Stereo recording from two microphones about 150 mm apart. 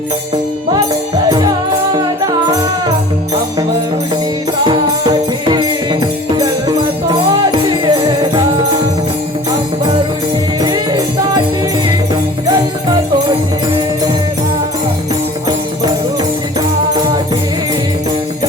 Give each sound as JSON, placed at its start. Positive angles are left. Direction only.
{"t": 5.5, "sound": "music", "side_deg": -30}
{"t": 7.7, "sound": "music", "side_deg": -30}
{"t": 10.6, "sound": "music", "side_deg": -25}